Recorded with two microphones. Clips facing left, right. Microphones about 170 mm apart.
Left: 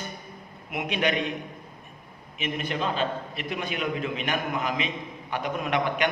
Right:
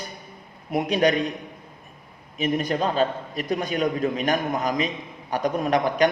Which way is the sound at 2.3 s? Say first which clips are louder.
Right 6 dB; 40° right (ahead or behind).